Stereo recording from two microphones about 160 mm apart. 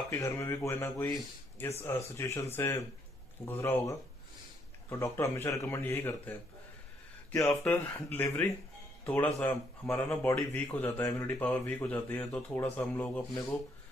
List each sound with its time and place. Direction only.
0.1 s speech: 20° left (ahead or behind)
7.6 s speech: 10° left (ahead or behind)